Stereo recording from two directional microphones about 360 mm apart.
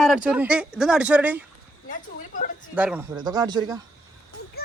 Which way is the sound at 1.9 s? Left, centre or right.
Left.